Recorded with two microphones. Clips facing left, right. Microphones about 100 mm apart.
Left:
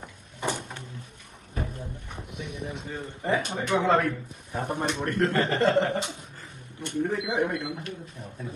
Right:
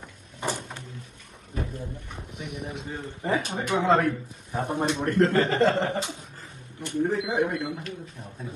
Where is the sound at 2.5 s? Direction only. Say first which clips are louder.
Right 1 dB; 20° right (ahead or behind).